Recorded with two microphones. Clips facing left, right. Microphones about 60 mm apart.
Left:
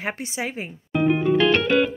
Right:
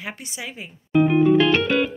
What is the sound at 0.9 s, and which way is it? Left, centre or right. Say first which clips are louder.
Music: right 4 dB; centre.